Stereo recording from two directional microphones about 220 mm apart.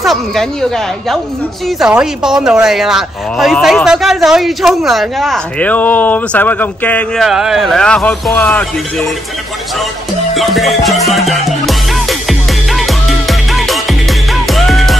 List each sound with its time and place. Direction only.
0.0 s speech: centre (ahead or behind)
10.3 s music: centre (ahead or behind)